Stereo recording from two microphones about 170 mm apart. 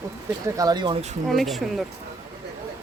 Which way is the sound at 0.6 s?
25° right (ahead or behind).